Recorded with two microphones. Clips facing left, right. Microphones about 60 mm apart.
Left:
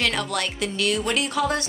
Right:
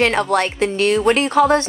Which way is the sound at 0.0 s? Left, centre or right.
Right.